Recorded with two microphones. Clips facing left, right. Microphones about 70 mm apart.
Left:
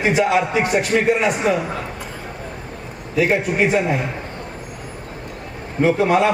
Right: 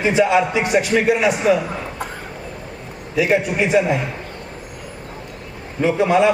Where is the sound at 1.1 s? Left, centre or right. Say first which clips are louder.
Right 2 dB; left.